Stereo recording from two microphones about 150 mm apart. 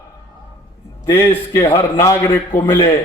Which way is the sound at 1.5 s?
15° left (ahead or behind).